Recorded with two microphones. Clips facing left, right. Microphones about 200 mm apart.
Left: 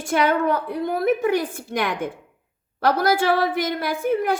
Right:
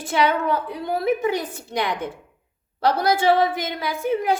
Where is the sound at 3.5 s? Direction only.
50° left (ahead or behind).